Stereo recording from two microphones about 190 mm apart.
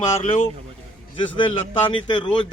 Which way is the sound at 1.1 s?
25° left (ahead or behind).